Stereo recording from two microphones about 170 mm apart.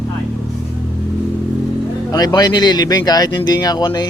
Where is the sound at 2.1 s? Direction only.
20° left (ahead or behind).